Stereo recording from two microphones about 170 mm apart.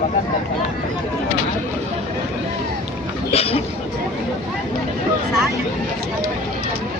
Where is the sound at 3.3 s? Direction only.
35° left (ahead or behind).